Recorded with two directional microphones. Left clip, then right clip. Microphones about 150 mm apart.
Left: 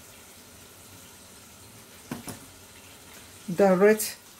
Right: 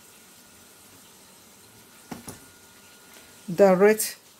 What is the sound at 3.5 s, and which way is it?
Speech, 50° right (ahead or behind).